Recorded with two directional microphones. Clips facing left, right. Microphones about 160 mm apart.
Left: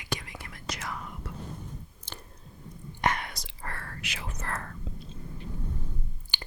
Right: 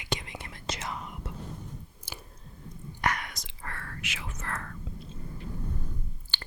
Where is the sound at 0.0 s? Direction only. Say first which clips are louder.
Right 1 dB; 20° right (ahead or behind).